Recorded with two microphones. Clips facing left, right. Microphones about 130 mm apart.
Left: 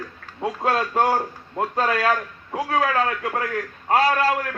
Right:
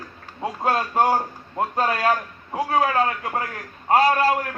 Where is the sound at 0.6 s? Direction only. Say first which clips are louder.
Right 1 dB; 45° right (ahead or behind).